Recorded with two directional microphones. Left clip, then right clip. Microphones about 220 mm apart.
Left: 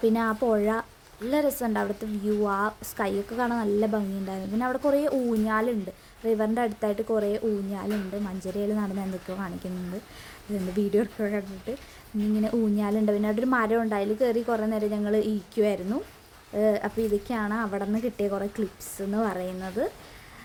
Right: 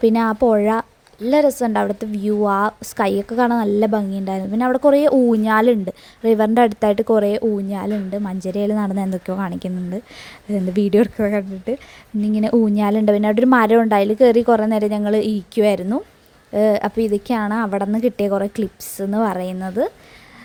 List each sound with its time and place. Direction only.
0.0 s a woman's voice: 30° right (ahead or behind)
10.8 s a woman's voice: 35° right (ahead or behind)